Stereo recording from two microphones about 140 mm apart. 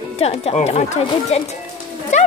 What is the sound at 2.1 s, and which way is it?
Music, 55° left (ahead or behind).